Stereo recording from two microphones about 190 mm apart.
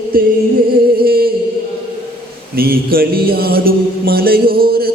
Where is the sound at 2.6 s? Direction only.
50° right (ahead or behind).